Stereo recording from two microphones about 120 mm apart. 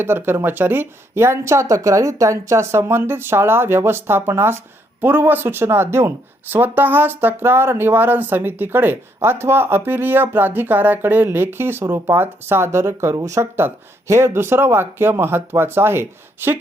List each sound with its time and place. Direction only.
0.0 s speech: 20° right (ahead or behind)